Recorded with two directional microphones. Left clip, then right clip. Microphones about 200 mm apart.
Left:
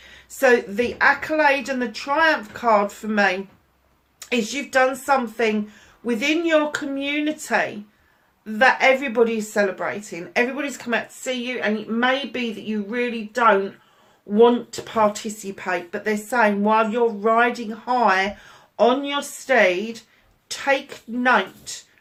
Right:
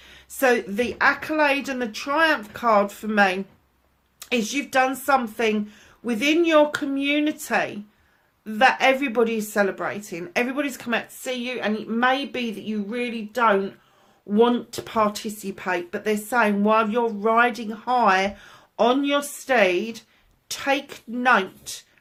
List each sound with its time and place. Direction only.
0.3 s speech: 45° right (ahead or behind)